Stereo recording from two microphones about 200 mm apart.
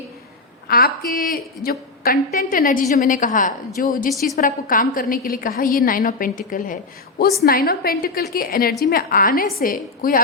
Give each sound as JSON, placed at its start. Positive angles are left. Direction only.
{"t": 0.7, "sound": "a woman's voice", "side_deg": 45}